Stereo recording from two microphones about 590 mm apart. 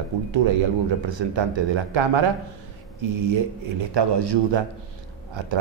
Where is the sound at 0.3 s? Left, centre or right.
Right.